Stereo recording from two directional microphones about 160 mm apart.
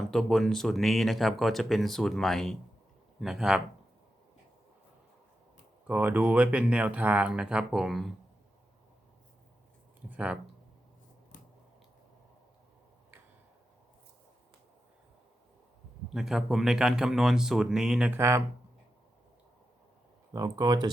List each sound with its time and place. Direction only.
0.0 s speech: centre (ahead or behind)
5.9 s speech: 10° right (ahead or behind)
10.1 s speech: 5° right (ahead or behind)
16.1 s speech: centre (ahead or behind)
18.1 s speech: 15° right (ahead or behind)
20.3 s speech: 25° right (ahead or behind)